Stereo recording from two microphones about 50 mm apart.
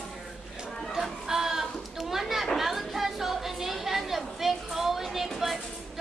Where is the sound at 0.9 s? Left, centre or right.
Centre.